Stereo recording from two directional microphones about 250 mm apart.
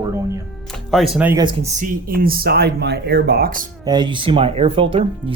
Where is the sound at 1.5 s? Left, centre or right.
Right.